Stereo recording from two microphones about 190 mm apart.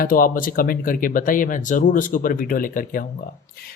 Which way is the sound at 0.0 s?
50° left (ahead or behind).